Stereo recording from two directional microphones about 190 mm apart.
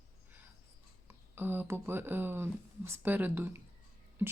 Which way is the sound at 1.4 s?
10° right (ahead or behind).